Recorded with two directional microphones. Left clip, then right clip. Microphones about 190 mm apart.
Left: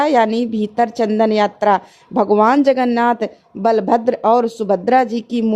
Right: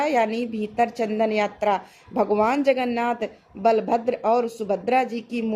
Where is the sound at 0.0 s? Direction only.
35° left (ahead or behind).